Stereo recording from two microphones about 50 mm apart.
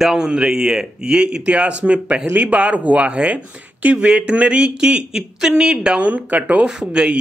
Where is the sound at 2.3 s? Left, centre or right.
Right.